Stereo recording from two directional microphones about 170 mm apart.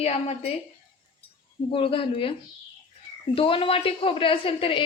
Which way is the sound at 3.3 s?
35° left (ahead or behind).